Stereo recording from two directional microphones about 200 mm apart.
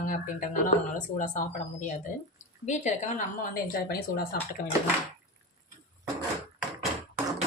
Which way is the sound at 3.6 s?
50° left (ahead or behind).